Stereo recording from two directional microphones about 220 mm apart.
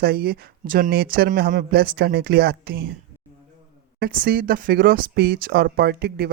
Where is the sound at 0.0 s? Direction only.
45° right (ahead or behind).